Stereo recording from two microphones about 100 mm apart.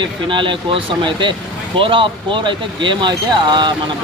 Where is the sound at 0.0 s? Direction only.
55° right (ahead or behind).